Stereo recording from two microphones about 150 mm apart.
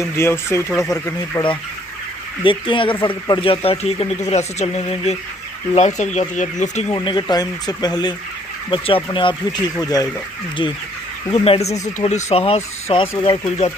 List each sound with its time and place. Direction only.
0.1 s speech: 15° left (ahead or behind)
0.7 s speech: centre (ahead or behind)
1.3 s speech: 20° left (ahead or behind)
2.4 s speech: 35° left (ahead or behind); by 6.9 s 50° left (ahead or behind)
6.9 s speech: 30° left (ahead or behind)
9.5 s speech: 25° left (ahead or behind)
11.3 s speech: 40° left (ahead or behind)
13.2 s speech: 30° left (ahead or behind)